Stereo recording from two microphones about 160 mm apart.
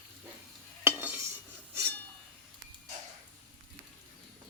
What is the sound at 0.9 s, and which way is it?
Stir, 15° right (ahead or behind).